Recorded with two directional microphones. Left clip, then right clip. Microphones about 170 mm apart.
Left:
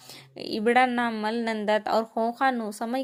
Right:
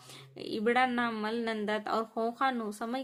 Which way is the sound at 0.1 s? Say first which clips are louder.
Left 5 dB; 35° left (ahead or behind).